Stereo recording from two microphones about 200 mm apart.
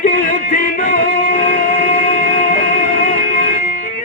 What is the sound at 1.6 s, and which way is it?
Music, 45° left (ahead or behind).